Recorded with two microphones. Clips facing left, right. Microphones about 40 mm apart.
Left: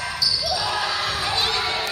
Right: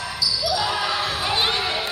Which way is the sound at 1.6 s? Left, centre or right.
Centre.